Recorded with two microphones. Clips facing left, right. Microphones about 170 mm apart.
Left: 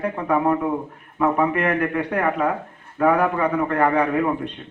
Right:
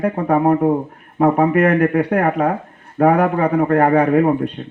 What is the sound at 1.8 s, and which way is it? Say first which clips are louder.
Speech: right 6 dB; 35° right (ahead or behind).